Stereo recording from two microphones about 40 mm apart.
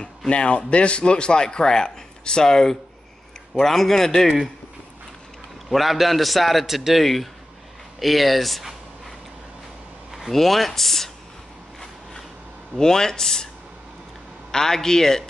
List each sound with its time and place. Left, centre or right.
0.3 s a man's voice: left; by 4.4 s centre
5.7 s a man's voice: centre
10.3 s a man's voice: centre
11.8 s a sound: centre
12.7 s speech: centre
14.5 s speech: centre